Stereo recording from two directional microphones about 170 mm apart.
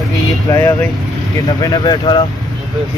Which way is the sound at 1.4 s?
25° left (ahead or behind).